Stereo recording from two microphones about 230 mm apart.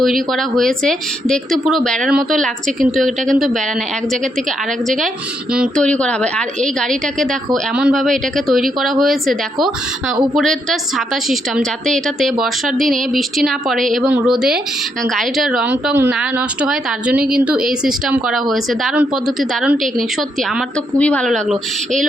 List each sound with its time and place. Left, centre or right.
0.0 s a woman's voice: centre
2.6 s a woman's voice: right
3.3 s a woman's voice: centre
5.5 s a woman's voice: centre